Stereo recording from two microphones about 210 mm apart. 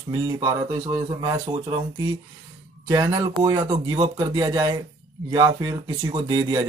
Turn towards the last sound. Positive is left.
turn(degrees=-15)  # may be behind; listen again after turning